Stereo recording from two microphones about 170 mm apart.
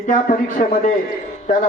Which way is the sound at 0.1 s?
50° left (ahead or behind).